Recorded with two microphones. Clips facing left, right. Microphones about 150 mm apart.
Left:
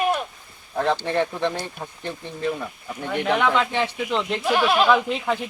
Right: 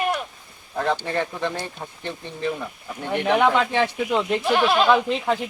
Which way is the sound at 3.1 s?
15° right (ahead or behind).